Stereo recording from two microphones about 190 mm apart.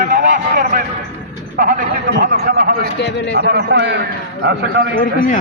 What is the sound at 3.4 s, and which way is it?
Speech, 60° right (ahead or behind).